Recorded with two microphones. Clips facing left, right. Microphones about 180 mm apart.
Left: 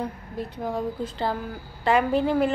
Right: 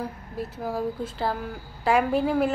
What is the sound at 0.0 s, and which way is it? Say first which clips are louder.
Speech: left 1 dB; 5° right (ahead or behind).